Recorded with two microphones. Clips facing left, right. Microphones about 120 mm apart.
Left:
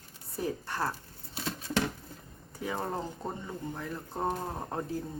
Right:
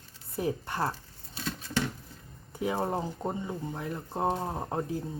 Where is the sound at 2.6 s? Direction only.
15° right (ahead or behind).